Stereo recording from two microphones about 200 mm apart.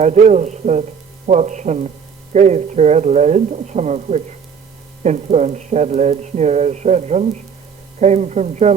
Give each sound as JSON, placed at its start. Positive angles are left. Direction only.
{"t": 0.0, "sound": "speech", "side_deg": -35}